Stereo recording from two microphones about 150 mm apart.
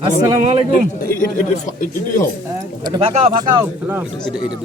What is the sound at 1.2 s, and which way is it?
Speech, 60° left (ahead or behind).